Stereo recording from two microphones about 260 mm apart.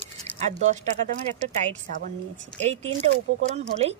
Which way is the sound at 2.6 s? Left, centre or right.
Right.